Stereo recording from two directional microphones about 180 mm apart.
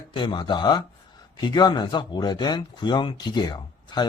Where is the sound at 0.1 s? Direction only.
25° left (ahead or behind).